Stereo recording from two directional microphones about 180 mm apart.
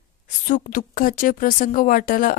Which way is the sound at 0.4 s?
45° left (ahead or behind).